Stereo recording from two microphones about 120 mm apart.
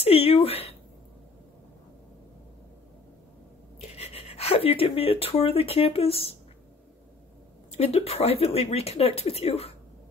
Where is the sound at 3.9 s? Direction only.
60° left (ahead or behind).